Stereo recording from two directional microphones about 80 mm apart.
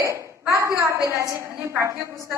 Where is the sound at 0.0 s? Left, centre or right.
Right.